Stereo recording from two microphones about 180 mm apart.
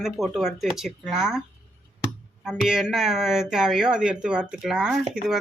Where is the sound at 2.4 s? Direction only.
Centre (ahead or behind).